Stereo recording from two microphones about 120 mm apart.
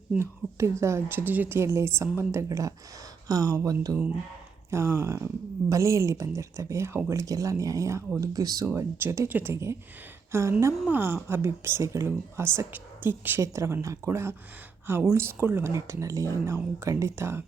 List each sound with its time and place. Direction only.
0.2 s speech: 25° right (ahead or behind)
8.6 s speech: 20° right (ahead or behind)